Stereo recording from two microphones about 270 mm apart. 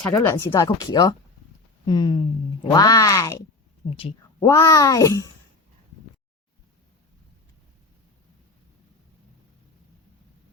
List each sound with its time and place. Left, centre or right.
0.1 s speech: centre